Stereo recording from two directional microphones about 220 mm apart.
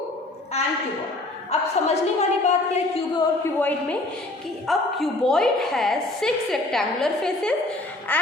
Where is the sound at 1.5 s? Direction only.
30° left (ahead or behind).